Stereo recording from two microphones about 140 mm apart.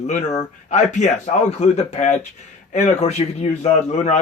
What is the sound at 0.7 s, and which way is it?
A man's voice, 55° left (ahead or behind).